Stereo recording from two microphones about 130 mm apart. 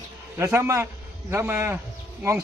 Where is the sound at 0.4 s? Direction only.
20° right (ahead or behind).